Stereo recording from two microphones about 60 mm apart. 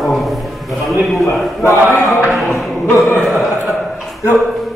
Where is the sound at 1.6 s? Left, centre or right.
Left.